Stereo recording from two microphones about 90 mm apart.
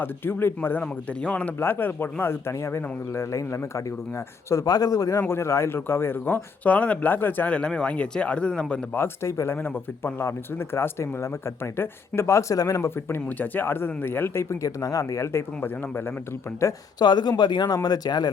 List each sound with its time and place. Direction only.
0.0 s speech: 25° left (ahead or behind)
9.0 s speech: 30° left (ahead or behind)
17.0 s speech: 55° left (ahead or behind)